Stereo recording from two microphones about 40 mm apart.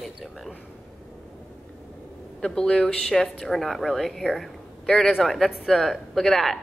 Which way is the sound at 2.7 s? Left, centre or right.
Centre.